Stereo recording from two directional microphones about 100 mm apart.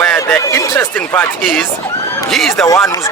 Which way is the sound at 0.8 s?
20° left (ahead or behind).